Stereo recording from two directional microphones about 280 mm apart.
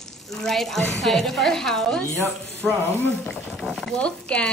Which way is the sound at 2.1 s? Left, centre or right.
Centre.